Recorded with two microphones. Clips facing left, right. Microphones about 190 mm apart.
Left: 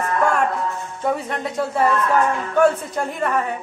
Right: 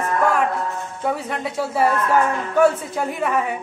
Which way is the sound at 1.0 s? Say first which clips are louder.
Left 1 dB; 5° right (ahead or behind).